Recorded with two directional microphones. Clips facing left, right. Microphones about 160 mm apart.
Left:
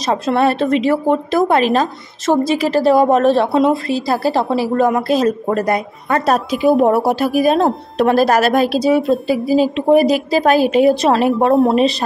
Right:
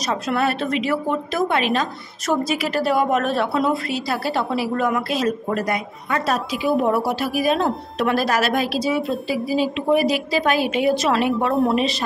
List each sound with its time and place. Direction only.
0.1 s a woman's voice: 30° left (ahead or behind)